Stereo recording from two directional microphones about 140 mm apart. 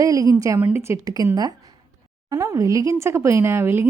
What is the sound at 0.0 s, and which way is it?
Speech, 25° right (ahead or behind).